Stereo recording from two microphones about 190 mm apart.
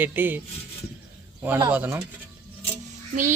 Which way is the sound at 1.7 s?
10° right (ahead or behind).